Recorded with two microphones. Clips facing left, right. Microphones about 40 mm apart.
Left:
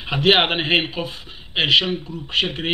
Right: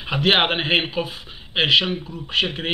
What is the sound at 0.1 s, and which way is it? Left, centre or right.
Speech, centre.